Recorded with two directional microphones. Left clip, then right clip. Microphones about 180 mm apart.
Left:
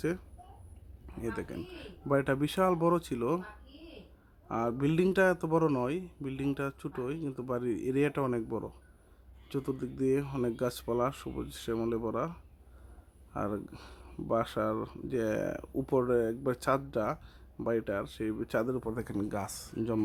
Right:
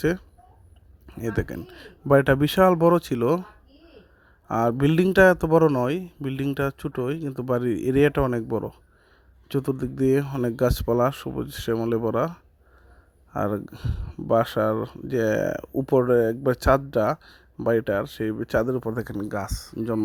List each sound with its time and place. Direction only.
1.0 s speech: 40° right (ahead or behind)
4.4 s speech: 40° right (ahead or behind)
10.2 s speech: 25° right (ahead or behind)
10.6 s speech: 40° right (ahead or behind)
19.1 s speech: 20° right (ahead or behind)